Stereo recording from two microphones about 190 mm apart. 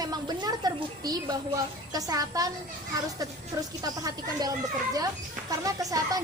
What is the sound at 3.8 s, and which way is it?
A woman's voice, 20° right (ahead or behind).